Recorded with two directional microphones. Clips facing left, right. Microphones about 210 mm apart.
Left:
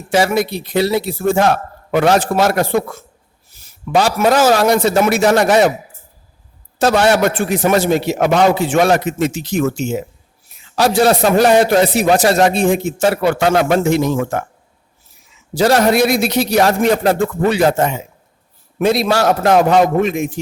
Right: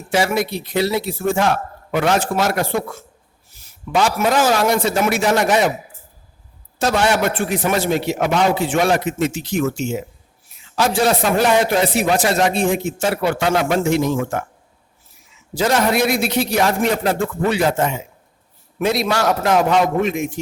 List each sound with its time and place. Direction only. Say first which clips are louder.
0.1 s a man's voice: left 4 dB; 35° left (ahead or behind)
3.9 s a man's voice: left 4 dB; 35° left (ahead or behind)
6.7 s a man's voice: left 5 dB; 35° left (ahead or behind)
15.5 s a man's voice: left 5 dB; 35° left (ahead or behind)